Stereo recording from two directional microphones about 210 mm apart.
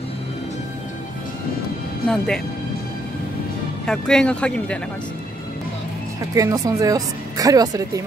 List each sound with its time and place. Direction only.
2.0 s speech: centre (ahead or behind)
3.8 s speech: 5° left (ahead or behind)
6.3 s speech: 15° right (ahead or behind)